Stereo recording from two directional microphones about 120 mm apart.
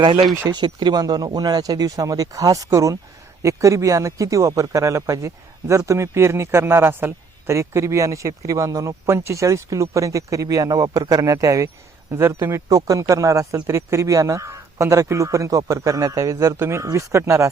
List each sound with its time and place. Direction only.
0.5 s speech: 40° right (ahead or behind)